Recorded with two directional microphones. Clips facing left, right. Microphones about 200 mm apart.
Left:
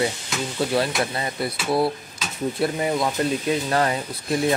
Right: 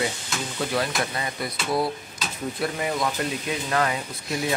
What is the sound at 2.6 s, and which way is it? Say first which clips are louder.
Speech: left 3 dB; 30° left (ahead or behind).